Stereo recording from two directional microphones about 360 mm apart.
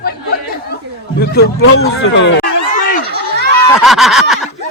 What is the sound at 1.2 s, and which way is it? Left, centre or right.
Speech, left.